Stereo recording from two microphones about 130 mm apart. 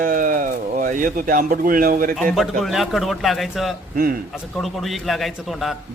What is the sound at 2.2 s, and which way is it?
A man's voice, 5° left (ahead or behind).